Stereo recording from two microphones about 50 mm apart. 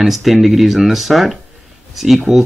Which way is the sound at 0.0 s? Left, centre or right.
Centre.